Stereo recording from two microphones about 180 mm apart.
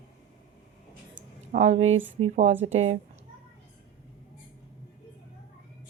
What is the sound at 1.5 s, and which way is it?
Speech, 40° right (ahead or behind).